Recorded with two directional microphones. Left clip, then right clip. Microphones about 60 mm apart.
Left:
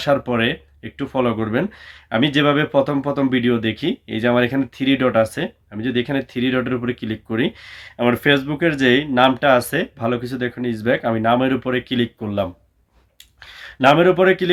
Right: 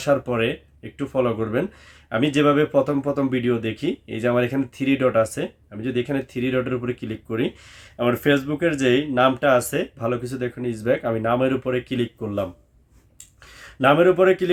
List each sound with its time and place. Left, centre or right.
0.0 s speech: right
7.3 s speech: centre; by 12.5 s right
13.5 s a sound: right
13.8 s speech: right